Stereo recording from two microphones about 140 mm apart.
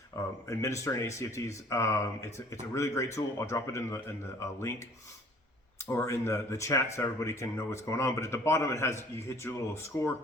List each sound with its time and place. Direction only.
0.4 s speech: 20° left (ahead or behind)
5.8 s speech: 20° left (ahead or behind)